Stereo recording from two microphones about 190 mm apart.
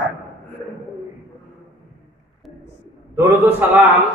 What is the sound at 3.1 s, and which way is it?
Speech, 15° right (ahead or behind).